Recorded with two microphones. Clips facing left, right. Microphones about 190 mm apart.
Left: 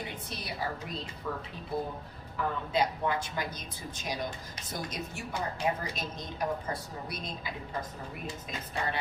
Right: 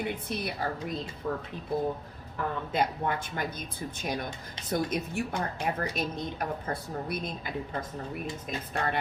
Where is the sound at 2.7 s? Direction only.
55° right (ahead or behind).